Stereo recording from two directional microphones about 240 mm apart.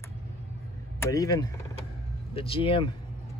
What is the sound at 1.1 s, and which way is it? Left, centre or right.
Speech, centre.